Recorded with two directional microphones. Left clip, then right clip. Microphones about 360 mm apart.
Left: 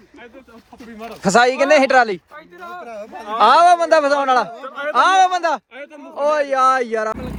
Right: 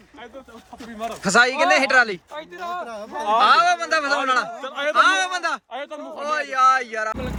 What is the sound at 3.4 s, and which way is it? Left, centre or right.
Speech, centre.